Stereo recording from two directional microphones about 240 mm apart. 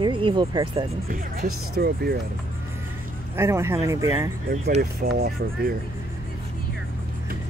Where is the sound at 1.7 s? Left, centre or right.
Right.